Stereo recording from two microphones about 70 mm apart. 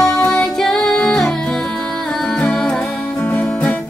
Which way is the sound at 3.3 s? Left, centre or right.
Left.